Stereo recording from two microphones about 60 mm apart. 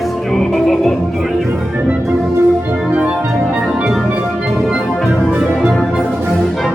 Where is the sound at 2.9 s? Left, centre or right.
Right.